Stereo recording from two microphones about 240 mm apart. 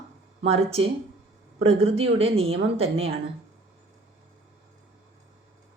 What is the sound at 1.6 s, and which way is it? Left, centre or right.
A woman's voice, right.